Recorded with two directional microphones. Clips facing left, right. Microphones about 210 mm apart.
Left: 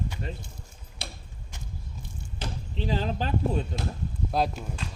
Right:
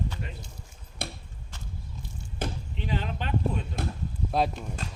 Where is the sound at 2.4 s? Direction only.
55° right (ahead or behind).